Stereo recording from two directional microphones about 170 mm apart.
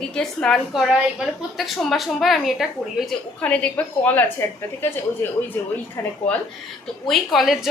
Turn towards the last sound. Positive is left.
turn(degrees=0)  # may be behind; listen again after turning